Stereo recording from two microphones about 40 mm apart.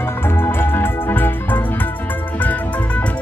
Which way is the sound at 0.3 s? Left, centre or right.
Left.